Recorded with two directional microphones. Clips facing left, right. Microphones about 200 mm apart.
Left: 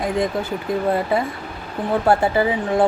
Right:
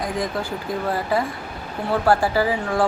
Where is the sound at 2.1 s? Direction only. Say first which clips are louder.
Left 1 dB; 20° left (ahead or behind).